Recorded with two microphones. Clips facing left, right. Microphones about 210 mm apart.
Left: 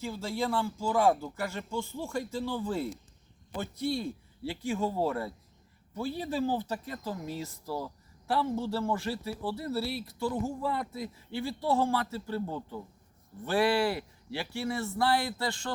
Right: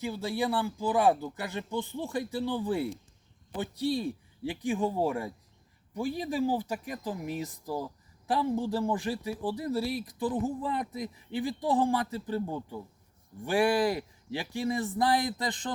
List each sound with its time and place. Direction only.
0.0 s speech: 15° right (ahead or behind)